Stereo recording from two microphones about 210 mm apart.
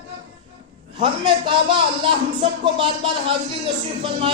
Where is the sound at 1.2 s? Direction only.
25° right (ahead or behind).